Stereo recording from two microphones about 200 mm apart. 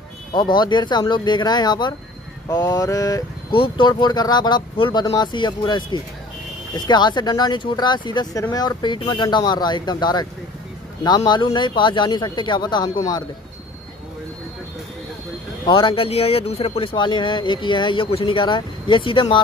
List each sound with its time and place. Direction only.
0.6 s speech: 20° left (ahead or behind)
15.6 s speech: 25° left (ahead or behind)